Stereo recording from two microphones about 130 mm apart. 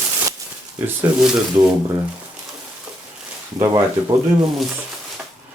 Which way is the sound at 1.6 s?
20° right (ahead or behind).